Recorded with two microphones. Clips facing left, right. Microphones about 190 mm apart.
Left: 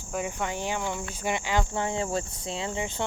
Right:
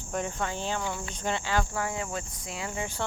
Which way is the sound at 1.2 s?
15° left (ahead or behind).